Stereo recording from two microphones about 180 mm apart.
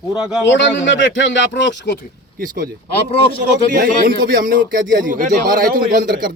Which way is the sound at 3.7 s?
50° right (ahead or behind).